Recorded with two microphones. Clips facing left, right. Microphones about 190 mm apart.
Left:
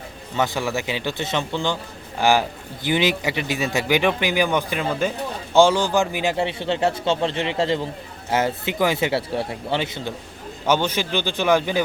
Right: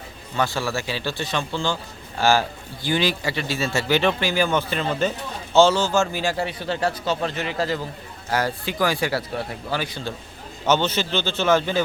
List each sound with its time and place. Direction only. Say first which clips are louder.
0.3 s a man's voice: left 1 dB; 20° left (ahead or behind)
10.7 s speech: even; 10° left (ahead or behind)